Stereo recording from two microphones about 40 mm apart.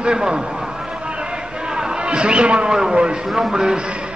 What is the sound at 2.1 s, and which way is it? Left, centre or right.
Speech, right.